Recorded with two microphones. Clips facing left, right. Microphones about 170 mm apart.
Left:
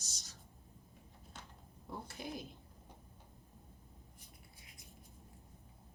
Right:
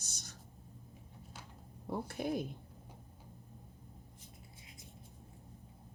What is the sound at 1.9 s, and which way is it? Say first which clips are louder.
Speech: right 9 dB; 55° right (ahead or behind).